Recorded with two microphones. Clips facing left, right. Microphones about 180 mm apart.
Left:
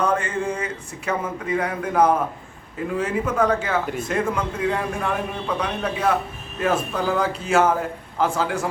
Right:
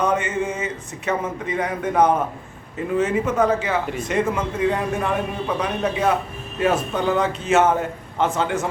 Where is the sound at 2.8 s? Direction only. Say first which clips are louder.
Right 3 dB; centre (ahead or behind).